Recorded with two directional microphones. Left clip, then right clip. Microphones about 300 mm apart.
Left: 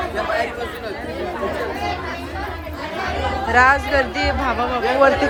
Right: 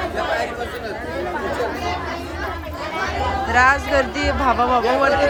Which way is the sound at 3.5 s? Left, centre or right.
Centre.